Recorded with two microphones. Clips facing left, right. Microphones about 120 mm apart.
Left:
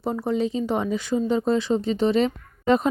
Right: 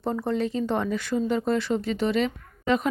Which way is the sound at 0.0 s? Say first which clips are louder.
Left 2 dB; 10° left (ahead or behind).